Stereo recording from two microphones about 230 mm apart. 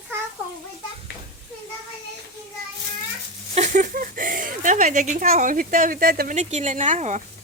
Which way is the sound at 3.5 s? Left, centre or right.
Right.